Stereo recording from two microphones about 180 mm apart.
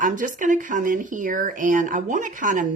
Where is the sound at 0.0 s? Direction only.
45° right (ahead or behind).